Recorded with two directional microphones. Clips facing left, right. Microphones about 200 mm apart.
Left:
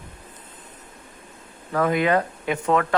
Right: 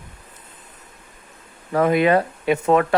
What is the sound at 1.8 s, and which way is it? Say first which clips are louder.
Speech: right 4 dB; 20° right (ahead or behind).